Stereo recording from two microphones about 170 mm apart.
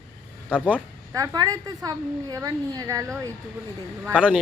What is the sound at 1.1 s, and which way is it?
A woman's voice, 20° right (ahead or behind).